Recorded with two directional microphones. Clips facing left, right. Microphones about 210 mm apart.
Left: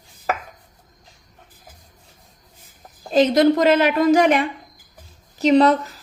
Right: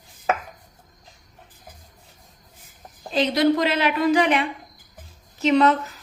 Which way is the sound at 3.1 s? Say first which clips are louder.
Left 5 dB; 45° left (ahead or behind).